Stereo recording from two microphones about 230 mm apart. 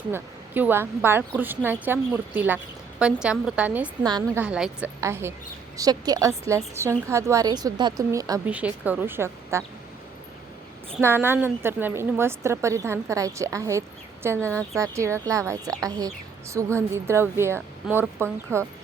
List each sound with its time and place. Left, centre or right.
0.1 s a woman's voice: centre
4.0 s a woman's voice: centre
4.4 s a woman's voice: centre
11.0 s a woman's voice: centre